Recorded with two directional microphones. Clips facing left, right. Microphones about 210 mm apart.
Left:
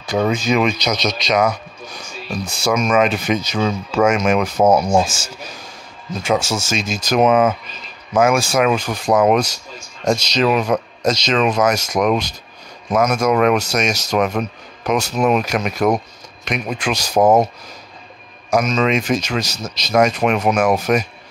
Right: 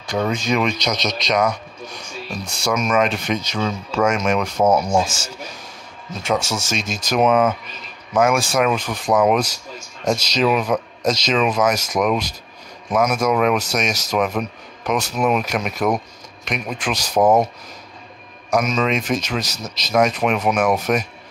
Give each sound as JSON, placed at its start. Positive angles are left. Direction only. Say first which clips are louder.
{"t": 0.0, "sound": "speech", "louder": "left 3 dB", "side_deg": 5}
{"t": 6.6, "sound": "speech", "louder": "left 3 dB", "side_deg": 0}
{"t": 17.2, "sound": "speech", "louder": "left 2 dB", "side_deg": 25}
{"t": 18.5, "sound": "speech", "louder": "left 2 dB", "side_deg": -5}